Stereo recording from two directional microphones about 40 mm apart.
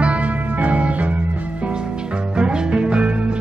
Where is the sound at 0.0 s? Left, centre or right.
Right.